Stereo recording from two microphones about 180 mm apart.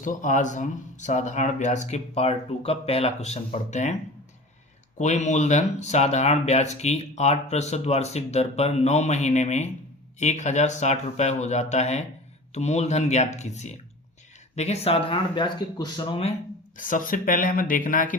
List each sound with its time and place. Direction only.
0.0 s speech: 45° left (ahead or behind)
4.9 s speech: 40° left (ahead or behind)
16.7 s speech: 45° left (ahead or behind)